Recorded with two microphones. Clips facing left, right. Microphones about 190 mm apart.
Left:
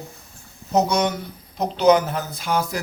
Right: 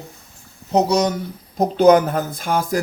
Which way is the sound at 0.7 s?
35° right (ahead or behind).